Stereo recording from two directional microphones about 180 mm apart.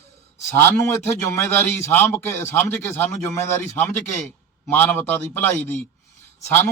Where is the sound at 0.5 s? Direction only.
10° left (ahead or behind).